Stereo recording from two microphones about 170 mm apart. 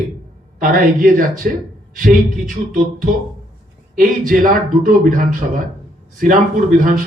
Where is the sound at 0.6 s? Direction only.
55° right (ahead or behind).